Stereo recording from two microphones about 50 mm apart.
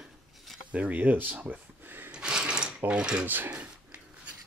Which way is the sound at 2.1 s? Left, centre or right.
Centre.